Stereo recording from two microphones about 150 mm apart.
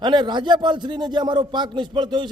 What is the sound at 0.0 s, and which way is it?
A man's voice, 30° right (ahead or behind).